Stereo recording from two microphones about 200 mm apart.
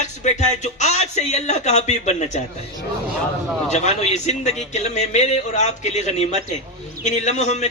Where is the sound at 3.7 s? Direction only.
35° left (ahead or behind).